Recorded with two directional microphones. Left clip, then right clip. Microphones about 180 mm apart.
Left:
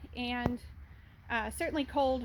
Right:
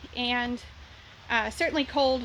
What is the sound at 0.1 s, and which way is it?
A woman's voice, centre (ahead or behind).